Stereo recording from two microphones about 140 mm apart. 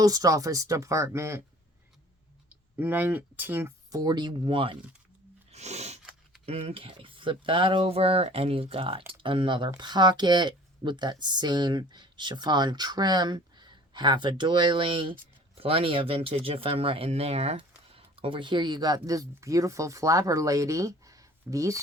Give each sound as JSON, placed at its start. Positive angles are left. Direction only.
{"t": 0.0, "sound": "speech", "side_deg": -25}
{"t": 2.5, "sound": "speech", "side_deg": -15}
{"t": 3.9, "sound": "speech", "side_deg": -30}
{"t": 5.5, "sound": "sneeze", "side_deg": -50}
{"t": 6.4, "sound": "speech", "side_deg": -45}